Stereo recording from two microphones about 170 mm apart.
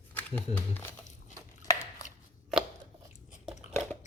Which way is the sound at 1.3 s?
20° left (ahead or behind).